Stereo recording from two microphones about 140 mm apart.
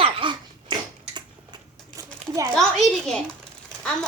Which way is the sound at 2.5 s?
5° left (ahead or behind).